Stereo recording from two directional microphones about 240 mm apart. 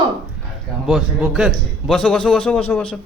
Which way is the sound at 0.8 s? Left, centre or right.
Centre.